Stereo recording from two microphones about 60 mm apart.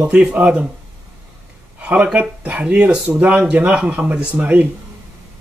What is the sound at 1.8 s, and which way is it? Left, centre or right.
Speech, right.